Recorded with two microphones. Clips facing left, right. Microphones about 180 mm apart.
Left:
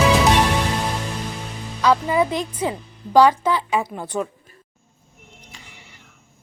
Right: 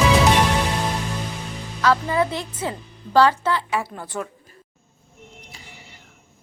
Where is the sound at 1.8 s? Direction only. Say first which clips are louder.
Left 2 dB; 15° left (ahead or behind).